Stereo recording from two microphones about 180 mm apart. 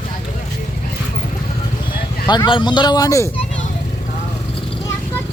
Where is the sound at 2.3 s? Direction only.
25° left (ahead or behind).